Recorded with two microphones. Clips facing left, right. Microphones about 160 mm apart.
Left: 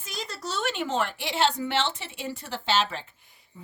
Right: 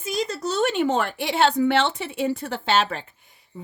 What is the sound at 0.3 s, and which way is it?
A woman's voice, 45° right (ahead or behind).